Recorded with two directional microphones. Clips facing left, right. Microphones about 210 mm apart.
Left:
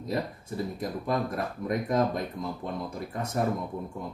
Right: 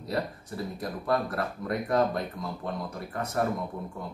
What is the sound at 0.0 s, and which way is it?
Speech, 20° left (ahead or behind).